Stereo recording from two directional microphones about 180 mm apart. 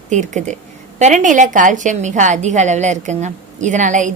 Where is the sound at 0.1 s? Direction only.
40° right (ahead or behind).